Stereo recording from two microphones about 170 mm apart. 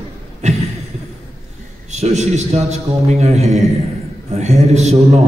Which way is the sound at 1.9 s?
40° right (ahead or behind).